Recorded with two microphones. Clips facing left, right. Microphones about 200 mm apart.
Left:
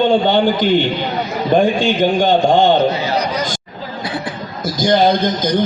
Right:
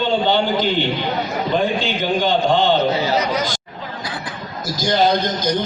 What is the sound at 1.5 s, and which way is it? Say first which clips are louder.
A man's voice: left 7 dB; 50° left (ahead or behind).